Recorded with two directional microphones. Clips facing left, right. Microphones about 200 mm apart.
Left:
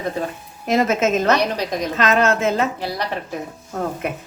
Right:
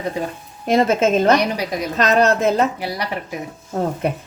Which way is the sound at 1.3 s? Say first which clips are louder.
Right 2 dB; 10° right (ahead or behind).